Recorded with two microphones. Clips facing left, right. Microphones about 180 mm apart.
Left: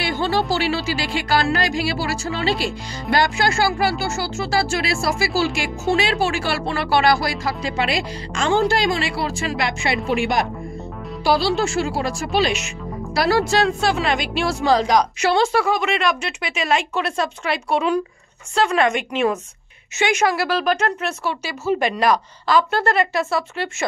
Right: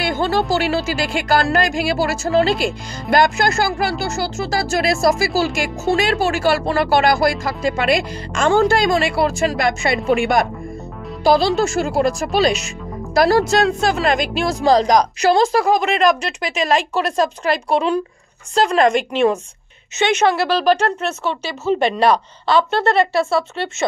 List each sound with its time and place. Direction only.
0.0 s music: 50° right (ahead or behind)
0.5 s a woman's voice: 45° right (ahead or behind); by 23.7 s 30° right (ahead or behind)